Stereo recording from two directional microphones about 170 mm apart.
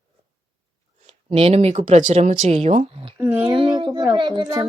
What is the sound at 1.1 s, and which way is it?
A woman's voice, 35° right (ahead or behind).